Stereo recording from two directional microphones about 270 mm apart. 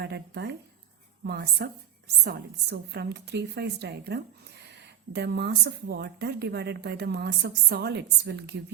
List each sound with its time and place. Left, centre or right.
0.0 s a woman's voice: right